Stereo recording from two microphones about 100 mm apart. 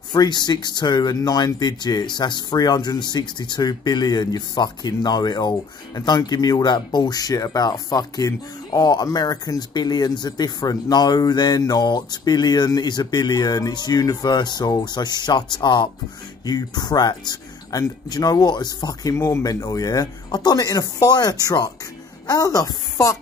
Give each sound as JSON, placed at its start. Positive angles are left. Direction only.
{"t": 0.1, "sound": "speech", "side_deg": 45}
{"t": 19.1, "sound": "speech", "side_deg": 30}